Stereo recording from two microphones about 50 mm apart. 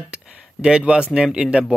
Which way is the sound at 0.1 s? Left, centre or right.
Centre.